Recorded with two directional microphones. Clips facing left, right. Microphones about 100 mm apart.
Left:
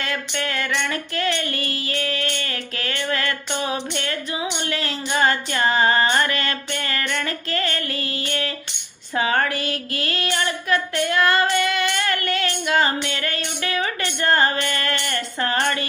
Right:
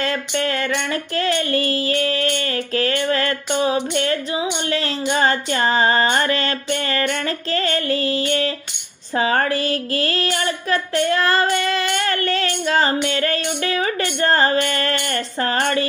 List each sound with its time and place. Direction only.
0.0 s speech: 35° right (ahead or behind)